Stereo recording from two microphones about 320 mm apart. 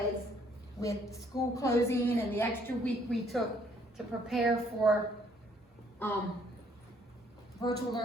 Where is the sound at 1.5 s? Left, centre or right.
Centre.